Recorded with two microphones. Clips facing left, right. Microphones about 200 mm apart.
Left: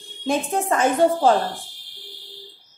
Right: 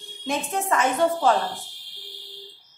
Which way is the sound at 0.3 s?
30° left (ahead or behind).